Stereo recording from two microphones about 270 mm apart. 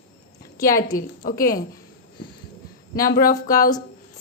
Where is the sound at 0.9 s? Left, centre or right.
Centre.